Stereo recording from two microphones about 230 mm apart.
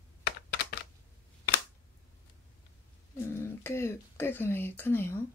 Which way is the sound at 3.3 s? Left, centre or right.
Centre.